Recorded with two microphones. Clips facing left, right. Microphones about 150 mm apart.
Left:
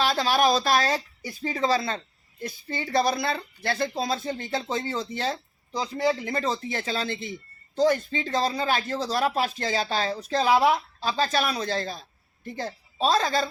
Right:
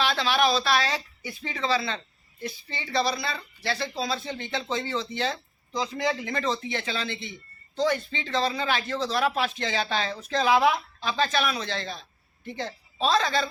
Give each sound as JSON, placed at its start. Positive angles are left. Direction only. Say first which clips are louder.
{"t": 0.0, "sound": "speech", "louder": "left 2 dB", "side_deg": 40}